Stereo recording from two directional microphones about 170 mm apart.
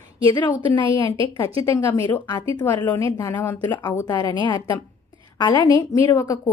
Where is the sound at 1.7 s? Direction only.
20° left (ahead or behind).